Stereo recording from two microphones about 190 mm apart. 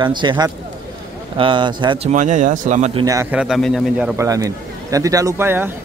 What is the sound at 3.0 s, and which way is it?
A man's voice, 15° right (ahead or behind).